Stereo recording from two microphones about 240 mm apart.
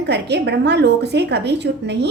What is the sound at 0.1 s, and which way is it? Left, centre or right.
A woman's voice, right.